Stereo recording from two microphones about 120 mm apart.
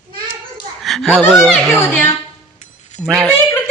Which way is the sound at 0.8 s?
Centre (ahead or behind).